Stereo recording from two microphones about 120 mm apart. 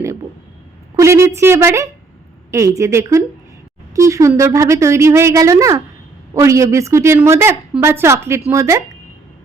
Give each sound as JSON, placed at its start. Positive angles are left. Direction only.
{"t": 0.9, "sound": "a woman's voice", "side_deg": -25}